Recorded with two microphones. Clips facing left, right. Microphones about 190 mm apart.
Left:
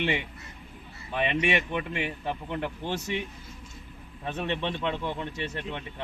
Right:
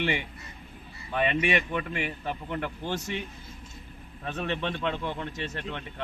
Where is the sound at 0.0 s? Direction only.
25° left (ahead or behind).